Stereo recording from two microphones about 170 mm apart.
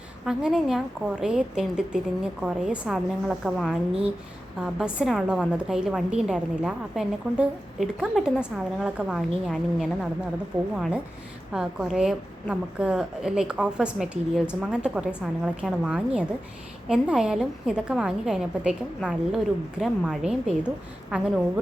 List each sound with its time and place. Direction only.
0.3 s a woman's voice: 5° right (ahead or behind)